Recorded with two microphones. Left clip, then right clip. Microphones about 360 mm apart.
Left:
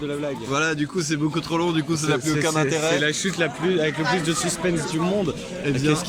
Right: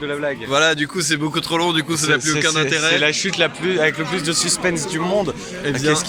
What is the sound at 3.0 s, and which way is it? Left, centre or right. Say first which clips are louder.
A man's voice: right 5 dB; centre.